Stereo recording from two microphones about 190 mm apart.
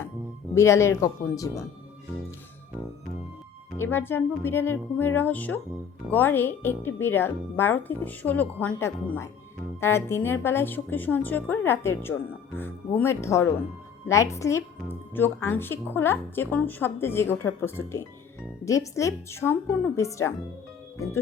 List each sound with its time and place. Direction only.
0.5 s a woman's voice: 15° left (ahead or behind)
3.8 s a woman's voice: 10° left (ahead or behind)